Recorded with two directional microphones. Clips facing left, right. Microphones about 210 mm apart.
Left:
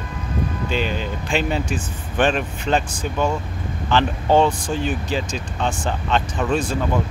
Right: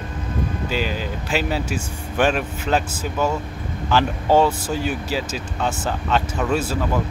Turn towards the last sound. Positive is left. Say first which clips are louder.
# even
turn(degrees=-5)  # may be behind; listen again after turning